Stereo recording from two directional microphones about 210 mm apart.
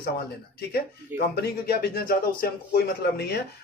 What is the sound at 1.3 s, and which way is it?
A man's voice, 50° left (ahead or behind).